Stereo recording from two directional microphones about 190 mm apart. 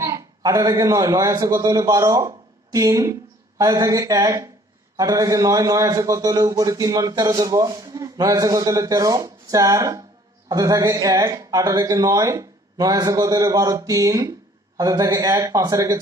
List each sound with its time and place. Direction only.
0.0 s a man's voice: 15° right (ahead or behind)